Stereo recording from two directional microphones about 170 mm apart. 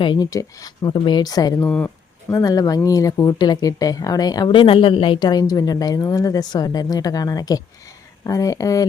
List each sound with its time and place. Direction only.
0.0 s speech: 25° left (ahead or behind)